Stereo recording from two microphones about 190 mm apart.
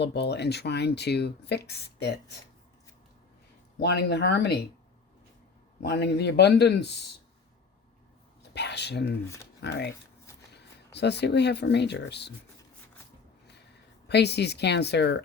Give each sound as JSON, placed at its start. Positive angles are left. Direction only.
{"t": 0.0, "sound": "speech", "side_deg": 60}
{"t": 3.8, "sound": "speech", "side_deg": 60}
{"t": 5.8, "sound": "speech", "side_deg": 60}
{"t": 8.5, "sound": "speech", "side_deg": 60}
{"t": 9.2, "sound": "speech", "side_deg": 15}
{"t": 9.6, "sound": "speech", "side_deg": 60}
{"t": 10.9, "sound": "speech", "side_deg": 60}
{"t": 14.1, "sound": "speech", "side_deg": 60}